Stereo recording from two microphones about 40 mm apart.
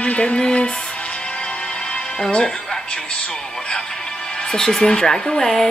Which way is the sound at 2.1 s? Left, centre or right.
Centre.